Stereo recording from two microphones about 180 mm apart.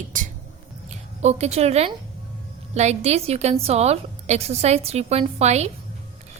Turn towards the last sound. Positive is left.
turn(degrees=-35)  # may be behind; listen again after turning